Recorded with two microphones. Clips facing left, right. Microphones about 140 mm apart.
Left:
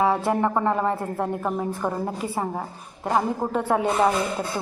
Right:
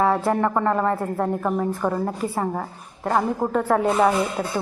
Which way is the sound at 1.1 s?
5° left (ahead or behind).